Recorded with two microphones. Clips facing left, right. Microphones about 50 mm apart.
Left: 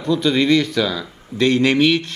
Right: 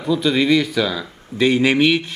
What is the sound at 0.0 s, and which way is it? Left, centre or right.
Speech, centre.